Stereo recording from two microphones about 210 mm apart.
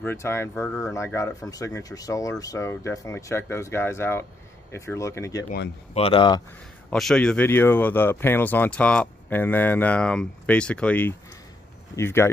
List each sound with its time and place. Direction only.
0.0 s speech: 10° left (ahead or behind)
5.9 s speech: 25° left (ahead or behind)
6.9 s speech: 5° left (ahead or behind)